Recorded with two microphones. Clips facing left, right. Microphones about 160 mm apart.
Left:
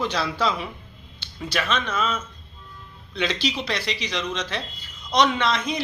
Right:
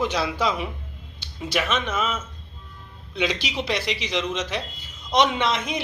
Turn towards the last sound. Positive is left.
turn(degrees=-20)  # may be behind; listen again after turning